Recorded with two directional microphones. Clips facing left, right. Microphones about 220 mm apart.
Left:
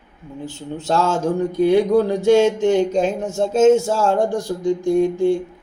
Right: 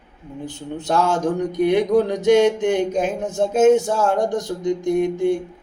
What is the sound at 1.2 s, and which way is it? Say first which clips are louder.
Speech: left 2 dB; 20° right (ahead or behind).